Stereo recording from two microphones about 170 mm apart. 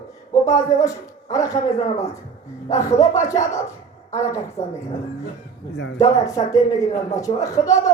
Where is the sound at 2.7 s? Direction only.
45° left (ahead or behind).